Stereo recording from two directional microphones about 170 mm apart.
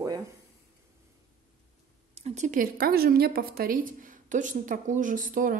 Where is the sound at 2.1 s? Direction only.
40° right (ahead or behind).